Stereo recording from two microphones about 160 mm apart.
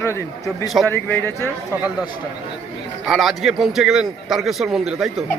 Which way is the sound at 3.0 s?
Centre (ahead or behind).